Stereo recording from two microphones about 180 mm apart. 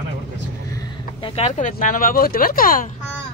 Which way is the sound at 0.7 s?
30° left (ahead or behind).